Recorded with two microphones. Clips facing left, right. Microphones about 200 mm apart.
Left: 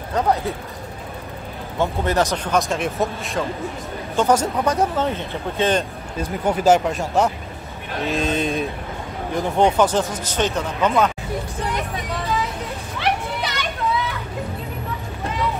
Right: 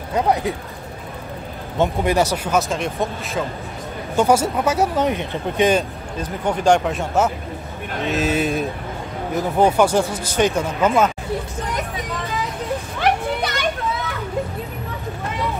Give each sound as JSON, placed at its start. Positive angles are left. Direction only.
{"t": 0.1, "sound": "speech", "side_deg": -15}
{"t": 1.8, "sound": "speech", "side_deg": -10}
{"t": 6.2, "sound": "speech", "side_deg": 5}
{"t": 13.4, "sound": "children playing", "side_deg": -50}